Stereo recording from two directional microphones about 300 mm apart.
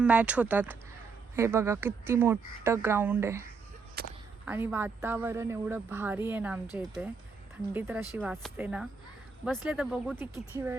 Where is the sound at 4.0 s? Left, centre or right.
Right.